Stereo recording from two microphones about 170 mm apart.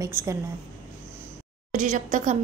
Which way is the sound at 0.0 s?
15° right (ahead or behind).